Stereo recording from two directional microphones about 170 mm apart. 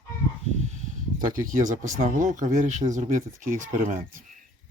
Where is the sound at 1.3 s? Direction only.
50° right (ahead or behind).